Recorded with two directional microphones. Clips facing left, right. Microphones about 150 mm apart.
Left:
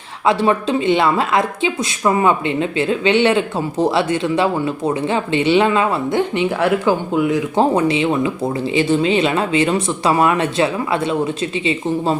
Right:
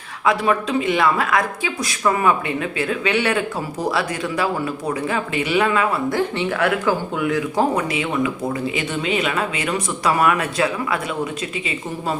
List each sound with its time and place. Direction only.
0.3 s speech: 30° left (ahead or behind)